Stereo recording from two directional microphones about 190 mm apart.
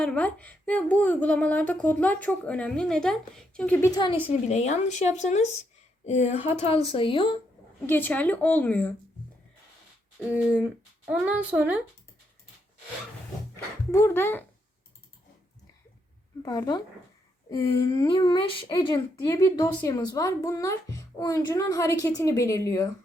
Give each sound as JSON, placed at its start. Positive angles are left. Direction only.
{"t": 0.0, "sound": "speech", "side_deg": 5}
{"t": 4.0, "sound": "a woman's voice", "side_deg": 30}
{"t": 7.9, "sound": "speech", "side_deg": 10}
{"t": 11.0, "sound": "a woman's voice", "side_deg": -5}
{"t": 13.9, "sound": "speech", "side_deg": 10}
{"t": 16.4, "sound": "speech", "side_deg": 20}